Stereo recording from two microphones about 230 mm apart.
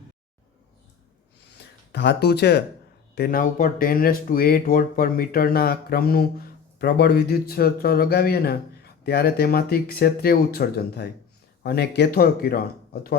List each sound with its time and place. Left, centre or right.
1.9 s speech: left